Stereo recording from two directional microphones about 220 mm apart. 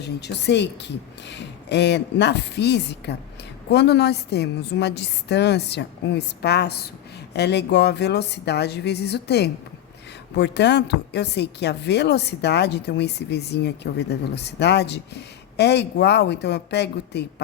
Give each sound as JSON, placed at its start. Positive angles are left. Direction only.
{"t": 0.0, "sound": "a woman's voice", "side_deg": 50}